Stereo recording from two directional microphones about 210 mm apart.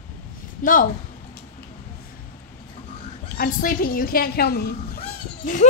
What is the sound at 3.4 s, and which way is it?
A woman's voice, 40° left (ahead or behind).